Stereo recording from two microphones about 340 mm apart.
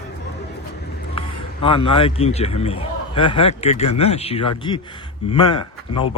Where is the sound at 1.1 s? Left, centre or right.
Centre.